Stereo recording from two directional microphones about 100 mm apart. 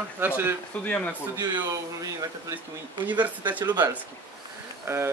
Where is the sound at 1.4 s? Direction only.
40° right (ahead or behind).